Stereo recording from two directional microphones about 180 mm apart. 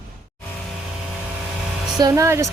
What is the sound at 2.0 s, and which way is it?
Speech, 20° right (ahead or behind).